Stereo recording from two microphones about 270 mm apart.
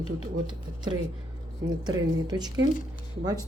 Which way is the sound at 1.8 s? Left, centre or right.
Centre.